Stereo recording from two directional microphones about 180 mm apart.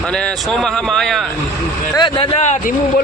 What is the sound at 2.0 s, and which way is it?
Speech, 30° left (ahead or behind).